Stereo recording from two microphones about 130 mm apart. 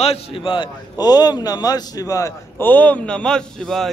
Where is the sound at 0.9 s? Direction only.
30° left (ahead or behind).